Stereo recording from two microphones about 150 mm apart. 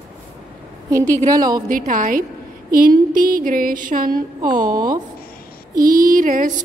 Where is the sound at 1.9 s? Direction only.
65° right (ahead or behind).